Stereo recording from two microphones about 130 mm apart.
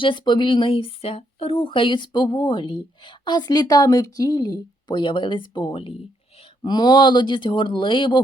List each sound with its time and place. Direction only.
0.0 s speech: 40° left (ahead or behind)
6.7 s speech: 35° left (ahead or behind)